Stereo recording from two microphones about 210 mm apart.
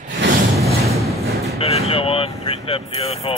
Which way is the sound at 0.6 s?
30° right (ahead or behind).